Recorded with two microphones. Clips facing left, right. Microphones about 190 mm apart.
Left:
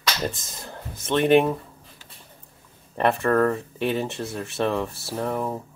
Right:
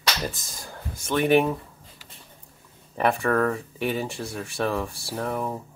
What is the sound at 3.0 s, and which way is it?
Speech, centre (ahead or behind).